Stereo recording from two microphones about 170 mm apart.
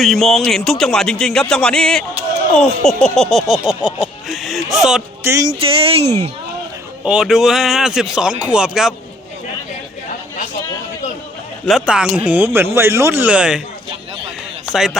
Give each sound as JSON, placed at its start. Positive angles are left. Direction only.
{"t": 0.0, "sound": "speech", "side_deg": 0}
{"t": 2.6, "sound": "a sound", "side_deg": 5}
{"t": 5.2, "sound": "music", "side_deg": -15}
{"t": 5.5, "sound": "speech", "side_deg": -30}
{"t": 7.0, "sound": "speech", "side_deg": -5}
{"t": 11.6, "sound": "speech", "side_deg": -5}
{"t": 14.7, "sound": "a man's voice", "side_deg": 0}